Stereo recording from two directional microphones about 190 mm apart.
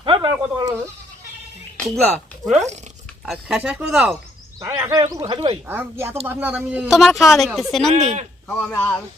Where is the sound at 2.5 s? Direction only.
35° right (ahead or behind).